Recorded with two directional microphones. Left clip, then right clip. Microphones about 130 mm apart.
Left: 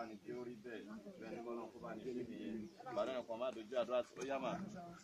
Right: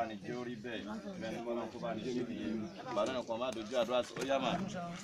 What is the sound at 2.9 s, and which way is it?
Speech, 5° right (ahead or behind).